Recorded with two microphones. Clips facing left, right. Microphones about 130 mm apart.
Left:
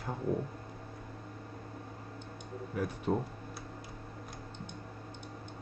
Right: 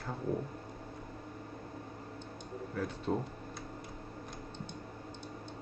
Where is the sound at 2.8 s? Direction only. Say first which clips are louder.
Left 2 dB; 15° left (ahead or behind).